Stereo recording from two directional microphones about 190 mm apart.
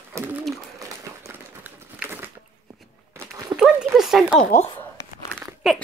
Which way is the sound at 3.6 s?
Centre (ahead or behind).